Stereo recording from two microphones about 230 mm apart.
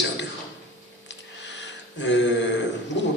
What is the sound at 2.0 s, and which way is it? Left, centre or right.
Speech, left.